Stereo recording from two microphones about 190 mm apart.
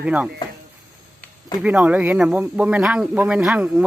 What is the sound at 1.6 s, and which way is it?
Speech, 5° right (ahead or behind).